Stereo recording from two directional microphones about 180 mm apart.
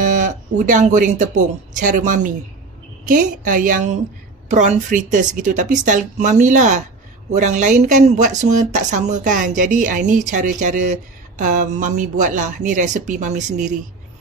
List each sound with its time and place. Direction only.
0.0 s speech: 45° right (ahead or behind)